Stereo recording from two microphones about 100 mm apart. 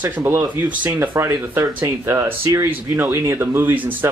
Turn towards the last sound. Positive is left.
turn(degrees=-20)  # may be behind; listen again after turning